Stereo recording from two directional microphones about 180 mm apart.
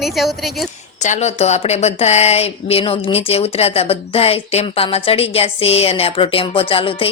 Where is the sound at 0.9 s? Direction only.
40° left (ahead or behind).